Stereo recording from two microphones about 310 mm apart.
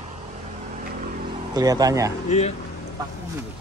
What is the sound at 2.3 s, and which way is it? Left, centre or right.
Speech, left.